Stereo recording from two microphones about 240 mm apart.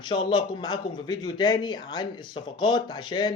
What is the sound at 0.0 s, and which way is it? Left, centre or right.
Speech, centre.